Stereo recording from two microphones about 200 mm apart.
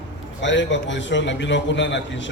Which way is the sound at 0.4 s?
65° left (ahead or behind).